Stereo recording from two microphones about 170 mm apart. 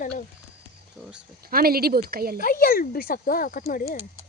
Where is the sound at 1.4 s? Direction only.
60° right (ahead or behind).